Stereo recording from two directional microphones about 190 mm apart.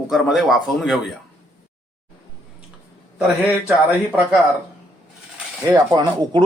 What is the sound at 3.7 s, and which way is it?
Speech, 5° right (ahead or behind).